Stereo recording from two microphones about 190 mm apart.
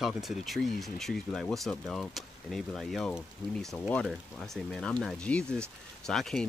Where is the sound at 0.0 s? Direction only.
Centre (ahead or behind).